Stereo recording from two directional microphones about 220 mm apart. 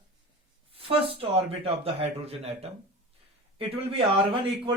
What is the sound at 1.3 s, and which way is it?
A man's voice, 25° right (ahead or behind).